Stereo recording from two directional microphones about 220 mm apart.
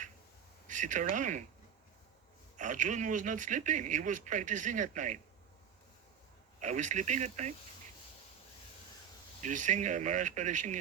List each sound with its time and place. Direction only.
0.7 s speech: 35° right (ahead or behind)
2.6 s speech: 35° right (ahead or behind)
6.6 s speech: 35° right (ahead or behind)
9.4 s speech: 35° right (ahead or behind)